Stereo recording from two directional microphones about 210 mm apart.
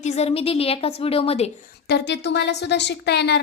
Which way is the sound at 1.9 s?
55° left (ahead or behind).